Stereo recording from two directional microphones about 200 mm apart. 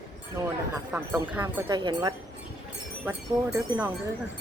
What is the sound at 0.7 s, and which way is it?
Speech, 10° right (ahead or behind).